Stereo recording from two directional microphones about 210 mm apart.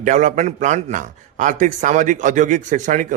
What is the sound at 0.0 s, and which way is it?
Speech, 35° right (ahead or behind).